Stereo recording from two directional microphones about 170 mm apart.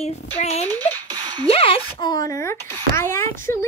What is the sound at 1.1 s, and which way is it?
Music, 25° right (ahead or behind).